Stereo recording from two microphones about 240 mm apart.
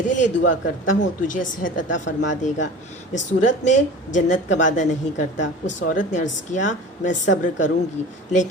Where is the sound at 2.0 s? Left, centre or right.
Left.